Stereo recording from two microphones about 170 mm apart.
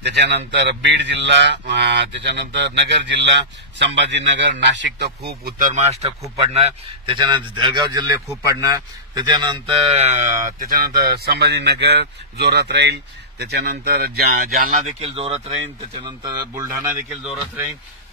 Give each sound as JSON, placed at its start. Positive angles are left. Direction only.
{"t": 0.0, "sound": "speech", "side_deg": -80}
{"t": 0.6, "sound": "a man's voice", "side_deg": -90}
{"t": 9.1, "sound": "speech", "side_deg": -25}
{"t": 14.8, "sound": "speech", "side_deg": -40}
{"t": 16.0, "sound": "a man's voice", "side_deg": -25}
{"t": 16.8, "sound": "speech", "side_deg": -10}